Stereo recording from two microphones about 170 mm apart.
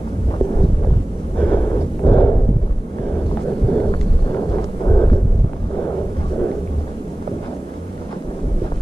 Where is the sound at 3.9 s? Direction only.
20° left (ahead or behind).